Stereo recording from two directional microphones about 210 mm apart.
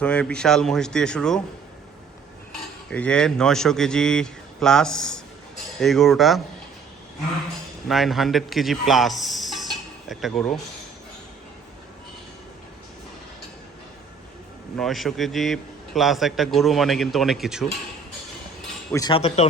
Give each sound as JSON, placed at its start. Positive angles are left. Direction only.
{"t": 0.0, "sound": "a man's voice", "side_deg": 5}
{"t": 2.5, "sound": "cutlery", "side_deg": 5}
{"t": 5.8, "sound": "a man's voice", "side_deg": 0}
{"t": 7.9, "sound": "speech", "side_deg": 0}
{"t": 14.8, "sound": "a man's voice", "side_deg": 0}
{"t": 18.9, "sound": "speech", "side_deg": 25}